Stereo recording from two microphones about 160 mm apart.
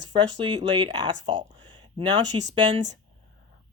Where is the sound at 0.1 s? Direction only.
30° right (ahead or behind).